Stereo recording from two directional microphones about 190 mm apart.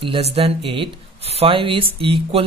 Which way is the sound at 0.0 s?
30° right (ahead or behind).